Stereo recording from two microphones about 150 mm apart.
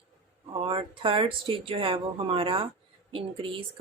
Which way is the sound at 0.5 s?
35° right (ahead or behind).